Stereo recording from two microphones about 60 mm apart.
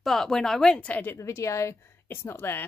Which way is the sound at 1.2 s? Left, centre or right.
Left.